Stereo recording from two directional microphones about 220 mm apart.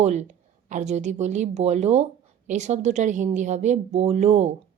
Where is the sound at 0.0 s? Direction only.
30° right (ahead or behind).